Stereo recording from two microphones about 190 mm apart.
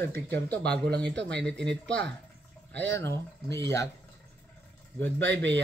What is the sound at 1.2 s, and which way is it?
Speech, 5° left (ahead or behind).